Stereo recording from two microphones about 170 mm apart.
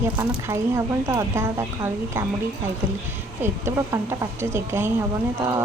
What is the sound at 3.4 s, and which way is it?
A woman's voice, 15° right (ahead or behind).